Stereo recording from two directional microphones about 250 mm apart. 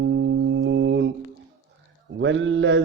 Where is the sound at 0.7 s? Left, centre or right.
Right.